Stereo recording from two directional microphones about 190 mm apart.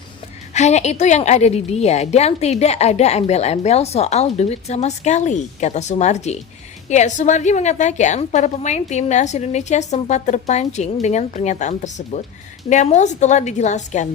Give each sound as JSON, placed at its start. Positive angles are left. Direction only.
{"t": 0.5, "sound": "a woman's voice", "side_deg": 35}